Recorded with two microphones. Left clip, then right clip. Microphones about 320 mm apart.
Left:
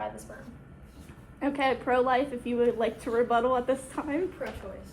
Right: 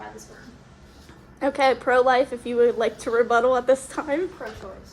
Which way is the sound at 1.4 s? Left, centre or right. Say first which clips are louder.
Right 7 dB; right.